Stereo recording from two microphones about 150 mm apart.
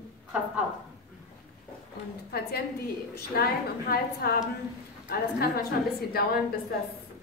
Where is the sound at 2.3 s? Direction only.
90° left.